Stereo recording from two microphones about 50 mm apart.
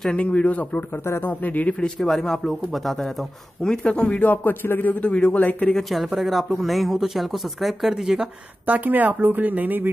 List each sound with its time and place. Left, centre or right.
0.1 s a man's voice: left
1.0 s speech: left
1.4 s speech: left
2.0 s speech: centre
3.6 s speech: centre
4.0 s speech: left
5.0 s a man's voice: left
5.8 s speech: centre
8.6 s speech: right